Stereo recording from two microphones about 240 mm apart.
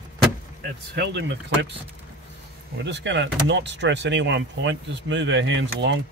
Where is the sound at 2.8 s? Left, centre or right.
Right.